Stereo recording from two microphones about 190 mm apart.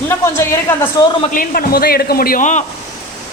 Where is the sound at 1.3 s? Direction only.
45° left (ahead or behind).